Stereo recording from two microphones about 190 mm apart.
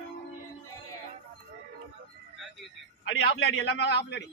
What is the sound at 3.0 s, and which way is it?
A man's voice, 75° left (ahead or behind).